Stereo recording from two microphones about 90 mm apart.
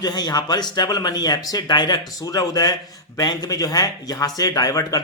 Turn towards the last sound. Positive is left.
turn(degrees=45)  # may be behind; listen again after turning